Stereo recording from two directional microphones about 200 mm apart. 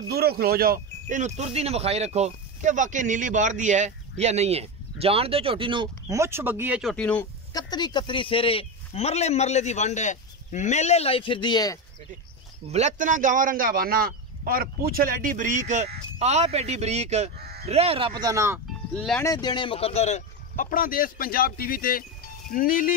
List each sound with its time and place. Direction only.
0.1 s speech: 50° right (ahead or behind); by 7.2 s 5° left (ahead or behind)
7.5 s speech: 20° left (ahead or behind)
12.6 s speech: 35° right (ahead or behind)
17.4 s bleat: 50° right (ahead or behind)
17.6 s speech: 30° right (ahead or behind); by 18.6 s 15° right (ahead or behind)
18.7 s speech: 5° left (ahead or behind)
19.3 s speech: 20° left (ahead or behind); by 22.9 s 45° left (ahead or behind)